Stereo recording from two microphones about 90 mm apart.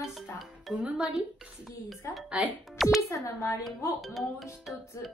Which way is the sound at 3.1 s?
35° left (ahead or behind).